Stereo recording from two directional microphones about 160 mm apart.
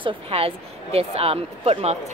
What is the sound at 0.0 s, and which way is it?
Speech, 35° right (ahead or behind).